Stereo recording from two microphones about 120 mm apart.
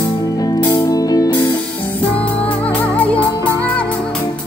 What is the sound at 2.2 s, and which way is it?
Music, 10° left (ahead or behind).